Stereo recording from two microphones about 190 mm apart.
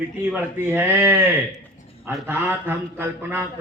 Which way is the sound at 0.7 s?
10° right (ahead or behind).